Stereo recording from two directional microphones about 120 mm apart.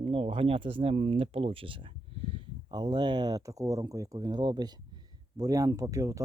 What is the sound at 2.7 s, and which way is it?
Speech, 40° right (ahead or behind).